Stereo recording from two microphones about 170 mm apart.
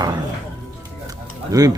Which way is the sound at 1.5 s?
20° right (ahead or behind).